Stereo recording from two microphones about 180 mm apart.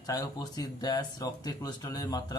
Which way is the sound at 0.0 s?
20° left (ahead or behind).